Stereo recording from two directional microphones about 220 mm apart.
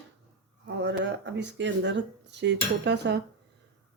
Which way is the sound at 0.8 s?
55° right (ahead or behind).